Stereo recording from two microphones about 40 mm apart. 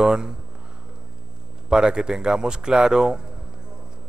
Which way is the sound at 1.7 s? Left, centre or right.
Right.